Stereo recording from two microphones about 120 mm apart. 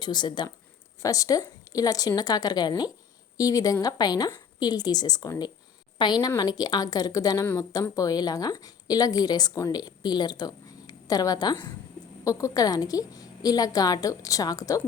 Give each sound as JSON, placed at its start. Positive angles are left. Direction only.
{"t": 0.0, "sound": "a woman's voice", "side_deg": 40}